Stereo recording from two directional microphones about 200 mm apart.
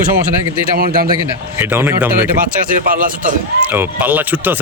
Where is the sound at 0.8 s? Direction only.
50° right (ahead or behind).